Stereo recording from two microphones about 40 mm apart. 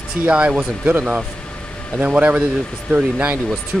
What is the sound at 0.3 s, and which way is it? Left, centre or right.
Speech, right.